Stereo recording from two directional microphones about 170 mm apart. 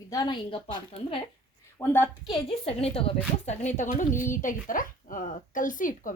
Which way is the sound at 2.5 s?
35° left (ahead or behind).